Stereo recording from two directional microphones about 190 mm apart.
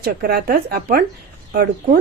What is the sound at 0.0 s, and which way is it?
A woman's voice, 55° right (ahead or behind).